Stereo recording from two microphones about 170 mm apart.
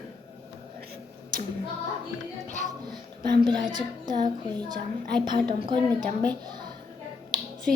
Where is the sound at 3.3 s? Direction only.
25° right (ahead or behind).